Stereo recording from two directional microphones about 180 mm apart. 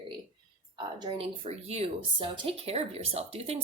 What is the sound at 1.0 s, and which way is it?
Speech, 30° right (ahead or behind).